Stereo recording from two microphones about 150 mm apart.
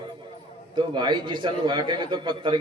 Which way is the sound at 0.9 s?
30° right (ahead or behind).